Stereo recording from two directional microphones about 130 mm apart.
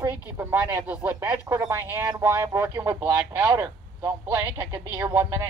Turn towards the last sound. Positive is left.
turn(degrees=-20)  # may be behind; listen again after turning